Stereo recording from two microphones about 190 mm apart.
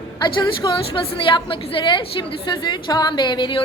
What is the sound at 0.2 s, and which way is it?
A woman's voice, 25° left (ahead or behind).